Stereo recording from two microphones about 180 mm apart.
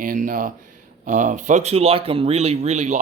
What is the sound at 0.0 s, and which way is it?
Speech, 50° right (ahead or behind).